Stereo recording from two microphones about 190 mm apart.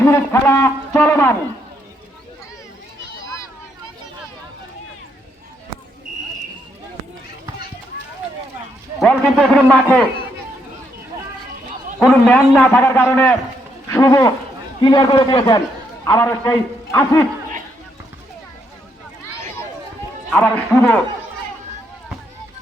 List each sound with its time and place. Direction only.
0.0 s a man's voice: 15° left (ahead or behind)
9.0 s a man's voice: 5° left (ahead or behind)
12.0 s a man's voice: 5° left (ahead or behind)
20.3 s a man's voice: 10° left (ahead or behind)